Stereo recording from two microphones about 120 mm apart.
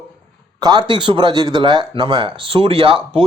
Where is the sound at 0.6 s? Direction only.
35° right (ahead or behind).